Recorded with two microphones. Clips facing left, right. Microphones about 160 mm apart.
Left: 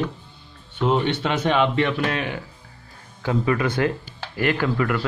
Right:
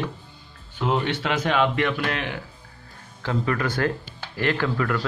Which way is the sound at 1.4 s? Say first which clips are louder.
Left 2 dB; 25° left (ahead or behind).